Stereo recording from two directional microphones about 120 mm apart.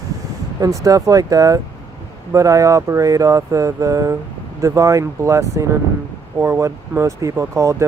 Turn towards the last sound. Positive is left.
turn(degrees=-25)  # may be behind; listen again after turning